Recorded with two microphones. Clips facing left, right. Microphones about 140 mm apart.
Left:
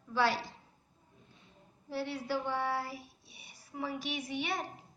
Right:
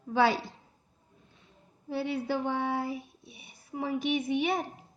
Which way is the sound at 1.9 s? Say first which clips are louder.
Right 5 dB; 55° right (ahead or behind).